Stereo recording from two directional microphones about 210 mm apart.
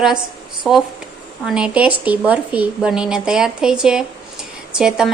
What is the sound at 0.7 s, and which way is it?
Speech, centre (ahead or behind).